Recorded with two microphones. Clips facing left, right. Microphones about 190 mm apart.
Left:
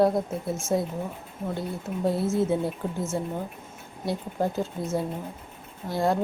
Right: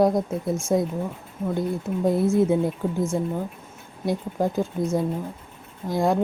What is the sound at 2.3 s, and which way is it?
A woman's voice, 15° right (ahead or behind).